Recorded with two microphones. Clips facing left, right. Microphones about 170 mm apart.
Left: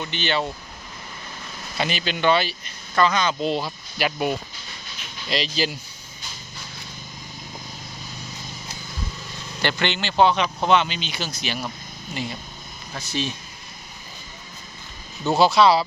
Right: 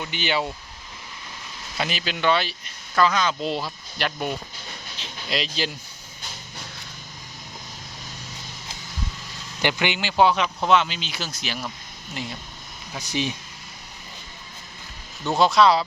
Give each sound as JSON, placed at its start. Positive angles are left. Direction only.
{"t": 0.0, "sound": "speech", "side_deg": -10}
{"t": 1.8, "sound": "speech", "side_deg": 0}
{"t": 9.6, "sound": "speech", "side_deg": -15}
{"t": 12.9, "sound": "speech", "side_deg": -15}
{"t": 15.2, "sound": "speech", "side_deg": 5}